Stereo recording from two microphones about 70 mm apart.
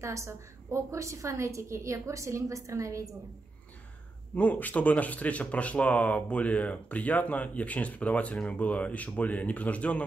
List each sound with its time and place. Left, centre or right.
0.0 s a woman's voice: right
4.4 s speech: left